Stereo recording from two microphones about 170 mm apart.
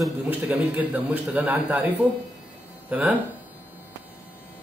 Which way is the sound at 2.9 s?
10° right (ahead or behind).